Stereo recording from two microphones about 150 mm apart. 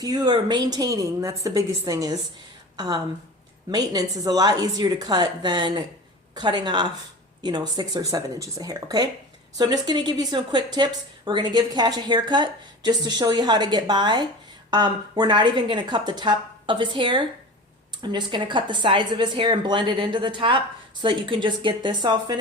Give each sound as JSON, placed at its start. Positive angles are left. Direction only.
{"t": 0.0, "sound": "a woman's voice", "side_deg": -25}